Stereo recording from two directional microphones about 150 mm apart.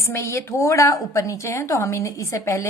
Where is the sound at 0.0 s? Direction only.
20° left (ahead or behind).